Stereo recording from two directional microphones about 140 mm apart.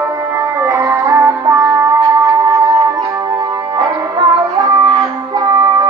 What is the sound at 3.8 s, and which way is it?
Music, 30° right (ahead or behind).